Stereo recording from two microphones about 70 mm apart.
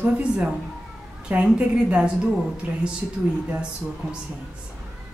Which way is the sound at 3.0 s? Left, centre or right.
Right.